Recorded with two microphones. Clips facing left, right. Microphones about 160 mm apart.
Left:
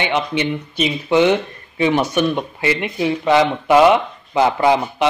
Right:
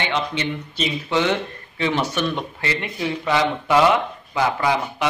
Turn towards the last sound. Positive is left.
turn(degrees=25)  # may be behind; listen again after turning